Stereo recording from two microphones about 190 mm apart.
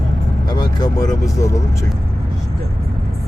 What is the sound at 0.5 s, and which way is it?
Vehicle, 20° left (ahead or behind).